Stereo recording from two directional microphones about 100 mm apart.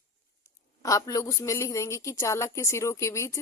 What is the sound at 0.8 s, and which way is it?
A woman's voice, 35° left (ahead or behind).